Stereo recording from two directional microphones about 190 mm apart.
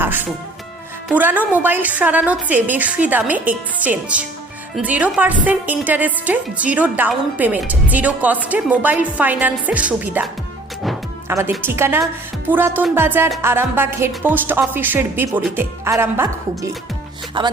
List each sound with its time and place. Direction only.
0.0 s music: 10° right (ahead or behind)
1.0 s a woman's voice: 10° right (ahead or behind)
11.3 s a woman's voice: 10° right (ahead or behind)
17.4 s speech: 25° right (ahead or behind)